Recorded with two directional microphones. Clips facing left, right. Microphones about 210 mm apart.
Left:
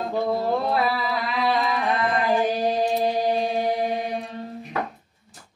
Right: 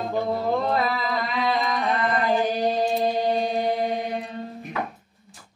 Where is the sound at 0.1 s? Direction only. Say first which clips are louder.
Left 1 dB; 5° left (ahead or behind).